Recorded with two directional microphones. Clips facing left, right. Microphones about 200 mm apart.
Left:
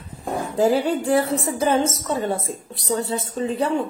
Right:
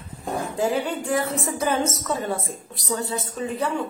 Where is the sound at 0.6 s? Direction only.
35° left (ahead or behind).